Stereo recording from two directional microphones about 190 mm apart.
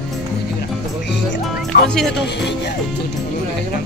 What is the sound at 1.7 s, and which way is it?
Music, 50° left (ahead or behind).